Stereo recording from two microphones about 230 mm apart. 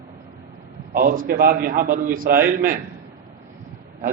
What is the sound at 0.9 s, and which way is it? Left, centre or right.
A man's voice, right.